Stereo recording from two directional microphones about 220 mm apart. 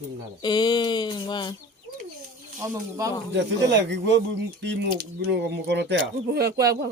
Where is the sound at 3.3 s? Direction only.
55° right (ahead or behind).